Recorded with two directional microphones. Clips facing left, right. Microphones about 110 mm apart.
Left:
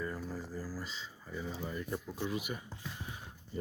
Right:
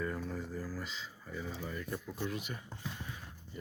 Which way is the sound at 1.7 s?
20° left (ahead or behind).